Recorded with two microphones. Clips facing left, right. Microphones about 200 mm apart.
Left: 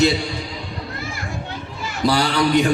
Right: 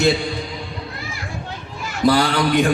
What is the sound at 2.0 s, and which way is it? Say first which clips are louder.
Speech: right 2 dB; 50° right (ahead or behind).